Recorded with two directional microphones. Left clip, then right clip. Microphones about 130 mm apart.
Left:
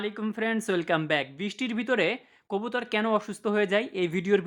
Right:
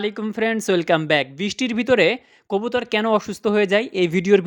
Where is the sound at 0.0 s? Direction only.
40° right (ahead or behind).